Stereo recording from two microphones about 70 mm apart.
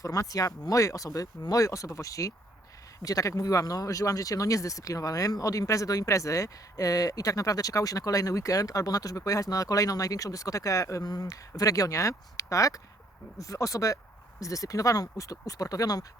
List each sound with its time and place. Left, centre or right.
0.0 s speech: left
11.0 s speech: left